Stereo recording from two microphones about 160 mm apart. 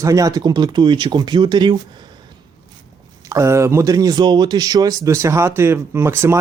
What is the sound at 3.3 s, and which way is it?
Speech, 20° right (ahead or behind).